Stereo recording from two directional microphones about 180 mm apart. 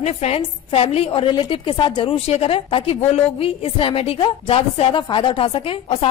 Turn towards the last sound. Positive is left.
turn(degrees=30)  # may be behind; listen again after turning